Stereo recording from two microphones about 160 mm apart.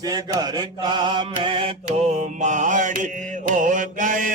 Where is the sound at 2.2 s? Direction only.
50° right (ahead or behind).